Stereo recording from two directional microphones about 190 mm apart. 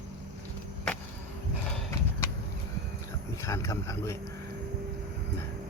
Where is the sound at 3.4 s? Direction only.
15° left (ahead or behind).